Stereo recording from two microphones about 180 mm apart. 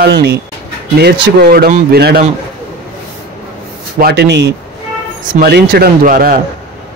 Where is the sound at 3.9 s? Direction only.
65° right (ahead or behind).